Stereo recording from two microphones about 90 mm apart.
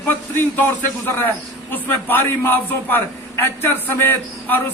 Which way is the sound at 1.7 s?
20° left (ahead or behind).